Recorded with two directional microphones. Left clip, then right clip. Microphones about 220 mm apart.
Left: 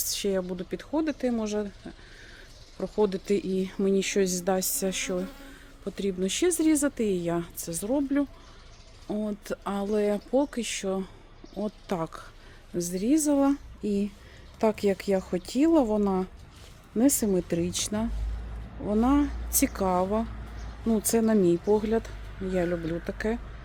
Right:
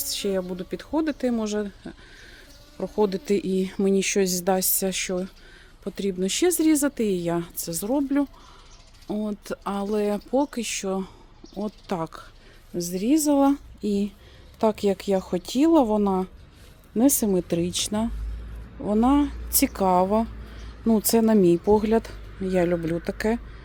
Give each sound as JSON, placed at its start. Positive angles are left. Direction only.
{"t": 0.0, "sound": "speech", "side_deg": -10}